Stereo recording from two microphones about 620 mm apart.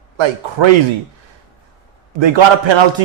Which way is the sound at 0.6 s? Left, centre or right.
Right.